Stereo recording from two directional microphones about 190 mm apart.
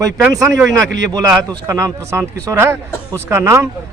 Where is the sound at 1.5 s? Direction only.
15° right (ahead or behind).